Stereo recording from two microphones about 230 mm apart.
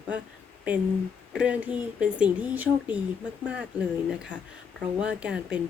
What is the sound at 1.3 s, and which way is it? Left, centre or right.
Speech, centre.